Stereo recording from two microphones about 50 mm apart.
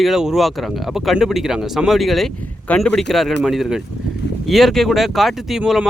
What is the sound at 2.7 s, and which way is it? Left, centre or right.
Speech, centre.